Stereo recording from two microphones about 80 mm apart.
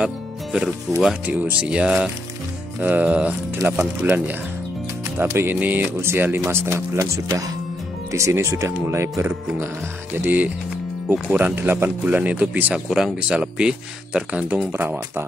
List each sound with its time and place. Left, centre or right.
0.0 s music: centre
1.2 s speech: centre; by 9.3 s right
10.1 s speech: right
14.7 s speech: right